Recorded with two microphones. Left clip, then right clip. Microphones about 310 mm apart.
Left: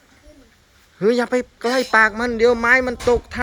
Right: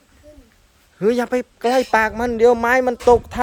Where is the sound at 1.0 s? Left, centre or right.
Centre.